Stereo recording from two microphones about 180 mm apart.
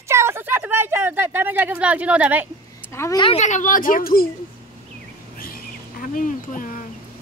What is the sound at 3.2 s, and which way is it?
Speech, 35° left (ahead or behind).